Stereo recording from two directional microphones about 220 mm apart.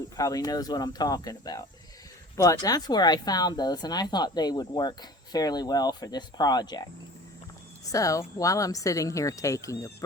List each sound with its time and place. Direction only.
0.2 s a woman's voice: 15° left (ahead or behind)
7.9 s a woman's voice: 15° left (ahead or behind)